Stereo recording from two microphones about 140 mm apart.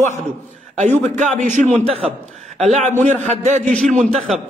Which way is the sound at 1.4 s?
60° right (ahead or behind).